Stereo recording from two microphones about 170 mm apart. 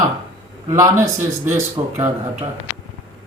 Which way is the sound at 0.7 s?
15° right (ahead or behind).